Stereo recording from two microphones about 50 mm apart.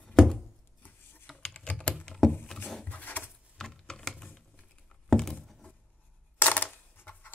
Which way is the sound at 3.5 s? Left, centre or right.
Centre.